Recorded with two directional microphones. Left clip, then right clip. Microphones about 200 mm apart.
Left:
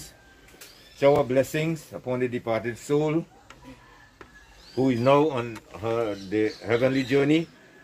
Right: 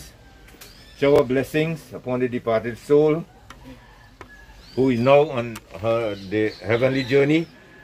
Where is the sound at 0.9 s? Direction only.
45° left (ahead or behind).